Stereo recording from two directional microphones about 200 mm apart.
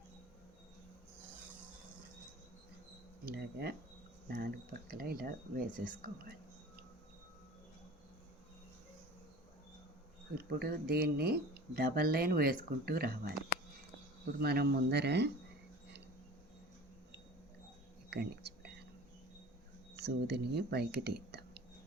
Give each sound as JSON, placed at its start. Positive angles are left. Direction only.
{"t": 3.2, "sound": "speech", "side_deg": -50}
{"t": 10.3, "sound": "speech", "side_deg": -50}
{"t": 14.3, "sound": "speech", "side_deg": -50}
{"t": 18.1, "sound": "whispering", "side_deg": -55}
{"t": 20.0, "sound": "speech", "side_deg": -55}